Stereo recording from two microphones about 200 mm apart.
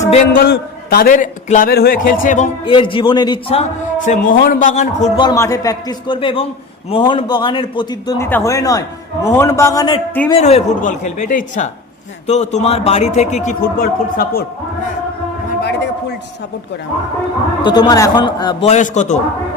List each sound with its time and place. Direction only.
0.3 s a man's voice: 50° left (ahead or behind)
2.6 s a man's voice: 25° left (ahead or behind)
3.6 s a man's voice: 40° left (ahead or behind)
5.2 s a man's voice: 15° left (ahead or behind)
10.2 s a man's voice: 30° left (ahead or behind); by 14.4 s 50° left (ahead or behind)
15.6 s a sound: 60° left (ahead or behind)
17.6 s a man's voice: 20° left (ahead or behind); by 19.1 s 35° left (ahead or behind)